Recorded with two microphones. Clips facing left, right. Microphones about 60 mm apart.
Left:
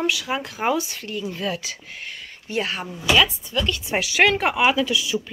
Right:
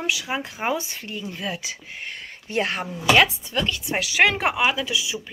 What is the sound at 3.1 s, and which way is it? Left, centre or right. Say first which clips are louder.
Speech: right 1 dB; right.